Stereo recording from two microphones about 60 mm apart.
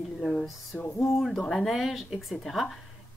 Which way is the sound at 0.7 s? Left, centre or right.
Left.